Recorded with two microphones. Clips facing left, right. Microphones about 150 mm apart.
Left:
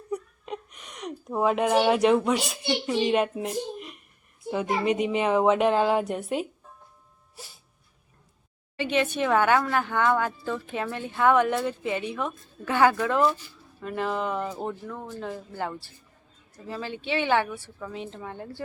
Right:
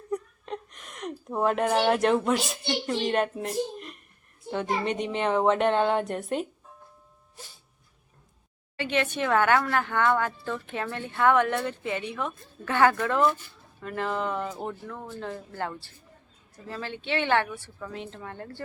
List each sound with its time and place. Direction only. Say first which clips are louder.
0.1 s a woman's voice: right 1 dB; 5° left (ahead or behind)
8.7 s speech: left 2 dB; 15° left (ahead or behind)
12.6 s speech: left 1 dB; 10° left (ahead or behind)